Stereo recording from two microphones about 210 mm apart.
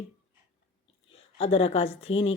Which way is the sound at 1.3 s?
25° left (ahead or behind).